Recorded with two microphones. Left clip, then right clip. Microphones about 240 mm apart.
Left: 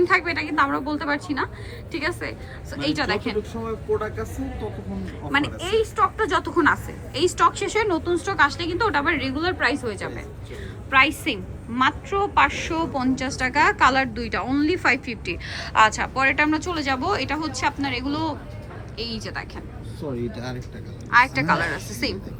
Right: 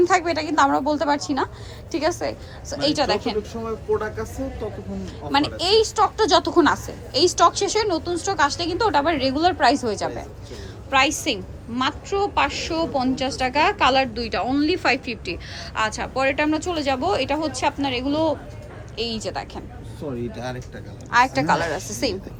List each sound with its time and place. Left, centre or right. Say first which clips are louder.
0.0 s a woman's voice: right 1 dB; centre
3.7 s speech: right 2 dB; centre
5.3 s a woman's voice: right 3 dB; centre
5.7 s a woman's voice: right 2 dB; right
10.9 s a woman's voice: left 1 dB; centre
20.0 s speech: right 1 dB; centre
21.1 s a woman's voice: even; centre